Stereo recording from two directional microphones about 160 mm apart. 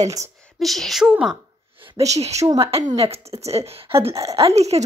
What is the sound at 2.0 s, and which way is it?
A woman's voice, 45° right (ahead or behind).